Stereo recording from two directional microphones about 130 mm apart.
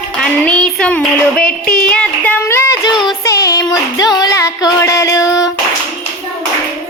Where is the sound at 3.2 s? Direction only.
25° left (ahead or behind).